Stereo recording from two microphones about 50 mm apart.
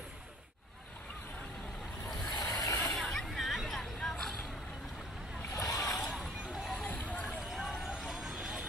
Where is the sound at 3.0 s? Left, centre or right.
Centre.